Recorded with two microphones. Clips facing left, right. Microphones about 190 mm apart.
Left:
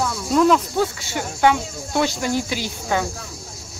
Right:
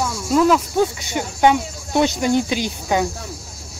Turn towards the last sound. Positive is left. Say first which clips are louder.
# right 3 dB
turn(degrees=-20)  # may be behind; listen again after turning